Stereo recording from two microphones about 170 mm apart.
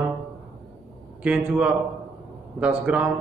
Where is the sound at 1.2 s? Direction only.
5° right (ahead or behind).